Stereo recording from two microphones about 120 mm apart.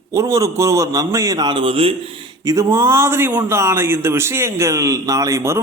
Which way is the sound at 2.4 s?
25° right (ahead or behind).